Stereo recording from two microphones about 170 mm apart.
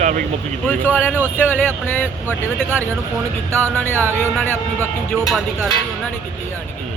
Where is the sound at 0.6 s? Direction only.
10° left (ahead or behind).